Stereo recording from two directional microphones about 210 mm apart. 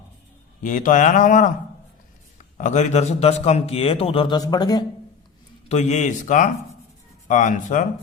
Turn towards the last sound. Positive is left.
turn(degrees=35)  # may be behind; listen again after turning